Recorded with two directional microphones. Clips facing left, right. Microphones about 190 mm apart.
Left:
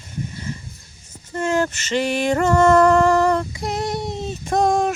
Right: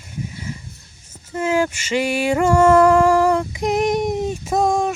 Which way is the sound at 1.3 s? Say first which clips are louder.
Right 1 dB; 5° right (ahead or behind).